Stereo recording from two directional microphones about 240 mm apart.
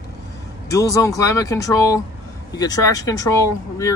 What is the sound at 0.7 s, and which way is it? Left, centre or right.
Speech, centre.